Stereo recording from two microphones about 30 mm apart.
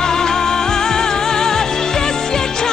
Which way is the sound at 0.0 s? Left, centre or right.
Left.